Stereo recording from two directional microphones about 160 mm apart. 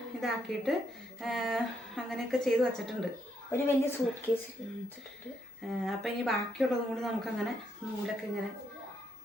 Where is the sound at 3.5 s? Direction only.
15° left (ahead or behind).